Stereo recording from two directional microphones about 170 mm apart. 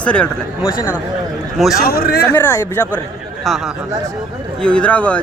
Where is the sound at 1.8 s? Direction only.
60° left (ahead or behind).